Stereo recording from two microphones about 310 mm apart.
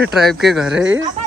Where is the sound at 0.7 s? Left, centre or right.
Right.